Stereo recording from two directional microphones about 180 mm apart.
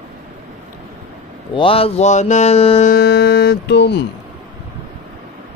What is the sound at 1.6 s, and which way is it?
Mantra, 30° left (ahead or behind).